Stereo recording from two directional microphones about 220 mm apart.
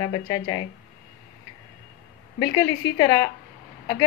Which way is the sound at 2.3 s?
15° left (ahead or behind).